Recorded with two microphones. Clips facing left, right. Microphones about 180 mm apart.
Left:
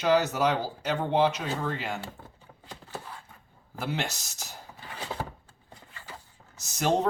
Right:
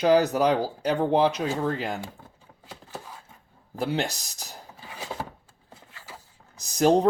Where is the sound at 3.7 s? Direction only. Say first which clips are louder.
Right 5 dB; 35° right (ahead or behind).